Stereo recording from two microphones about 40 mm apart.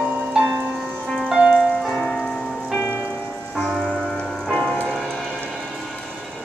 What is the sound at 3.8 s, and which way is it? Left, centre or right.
Rain on surface, centre.